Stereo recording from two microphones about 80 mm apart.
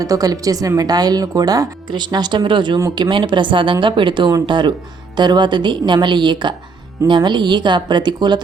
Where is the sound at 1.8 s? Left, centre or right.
Right.